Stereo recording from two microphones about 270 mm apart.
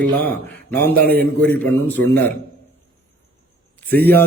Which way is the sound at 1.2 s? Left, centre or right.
Centre.